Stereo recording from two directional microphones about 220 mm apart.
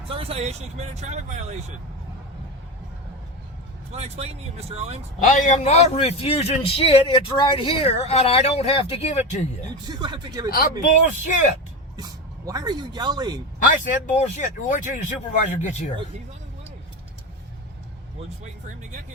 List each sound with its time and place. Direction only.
0.1 s speech: 25° right (ahead or behind)
3.9 s speech: 30° right (ahead or behind)
5.2 s a man's voice: 35° left (ahead or behind)
9.9 s speech: 20° right (ahead or behind)
11.3 s speech: 35° left (ahead or behind)
12.5 s speech: 15° right (ahead or behind)
13.7 s speech: 35° left (ahead or behind)